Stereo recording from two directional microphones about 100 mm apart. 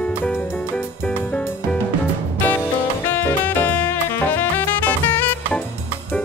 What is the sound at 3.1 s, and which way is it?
Music, 20° left (ahead or behind).